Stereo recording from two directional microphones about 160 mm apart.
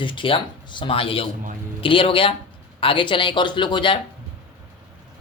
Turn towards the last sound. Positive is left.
turn(degrees=30)  # may be behind; listen again after turning